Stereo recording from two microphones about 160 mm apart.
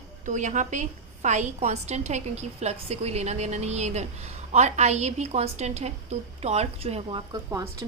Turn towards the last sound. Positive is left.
turn(degrees=-20)  # may be behind; listen again after turning